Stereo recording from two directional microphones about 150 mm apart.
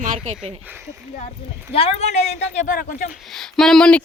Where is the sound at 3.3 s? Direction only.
5° left (ahead or behind).